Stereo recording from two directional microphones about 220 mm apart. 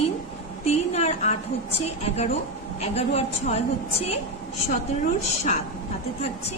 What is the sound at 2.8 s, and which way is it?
Speech, 30° left (ahead or behind).